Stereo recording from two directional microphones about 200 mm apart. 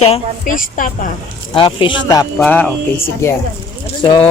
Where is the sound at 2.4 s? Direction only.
5° left (ahead or behind).